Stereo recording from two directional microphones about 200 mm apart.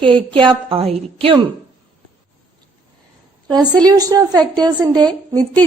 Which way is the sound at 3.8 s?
20° right (ahead or behind).